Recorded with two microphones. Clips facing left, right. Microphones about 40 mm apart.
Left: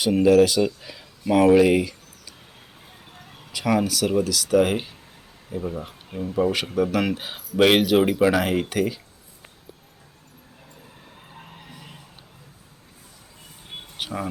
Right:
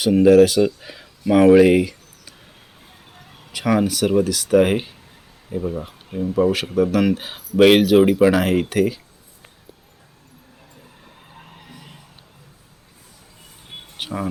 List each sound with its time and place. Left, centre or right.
0.2 s speech: centre
3.0 s vehicle: centre
3.5 s speech: right
5.5 s speech: centre
11.1 s skidding: centre
13.7 s a sound: centre